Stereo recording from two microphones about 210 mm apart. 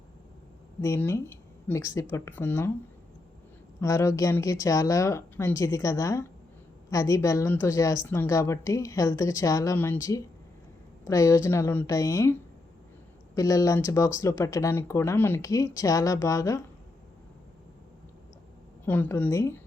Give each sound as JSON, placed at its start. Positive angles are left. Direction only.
{"t": 0.8, "sound": "speech", "side_deg": 10}
{"t": 3.8, "sound": "speech", "side_deg": 15}
{"t": 18.9, "sound": "speech", "side_deg": 10}